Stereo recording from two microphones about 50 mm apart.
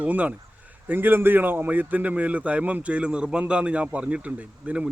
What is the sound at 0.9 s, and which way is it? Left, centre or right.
A man's voice, right.